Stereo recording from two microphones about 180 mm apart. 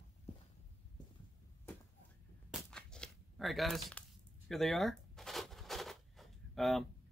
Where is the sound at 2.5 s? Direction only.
5° left (ahead or behind).